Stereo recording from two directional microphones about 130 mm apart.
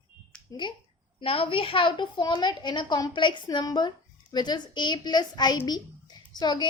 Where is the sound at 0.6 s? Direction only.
35° left (ahead or behind).